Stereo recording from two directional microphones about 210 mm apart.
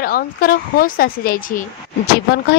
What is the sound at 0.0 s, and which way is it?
A woman's voice, 45° left (ahead or behind).